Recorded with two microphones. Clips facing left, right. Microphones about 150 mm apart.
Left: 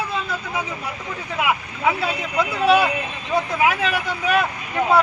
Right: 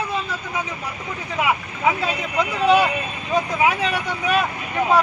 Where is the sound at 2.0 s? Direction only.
10° left (ahead or behind).